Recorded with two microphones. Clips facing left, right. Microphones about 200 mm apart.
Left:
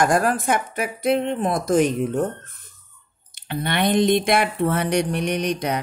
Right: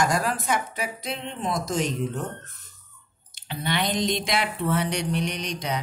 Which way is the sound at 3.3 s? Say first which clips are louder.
Left 4 dB; 55° left (ahead or behind).